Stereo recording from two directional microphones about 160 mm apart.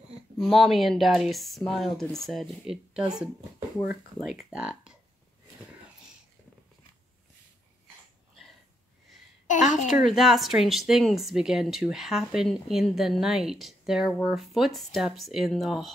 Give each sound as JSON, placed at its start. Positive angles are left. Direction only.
{"t": 0.4, "sound": "speech", "side_deg": 0}
{"t": 9.5, "sound": "a woman's voice", "side_deg": 50}
{"t": 10.0, "sound": "speech", "side_deg": 0}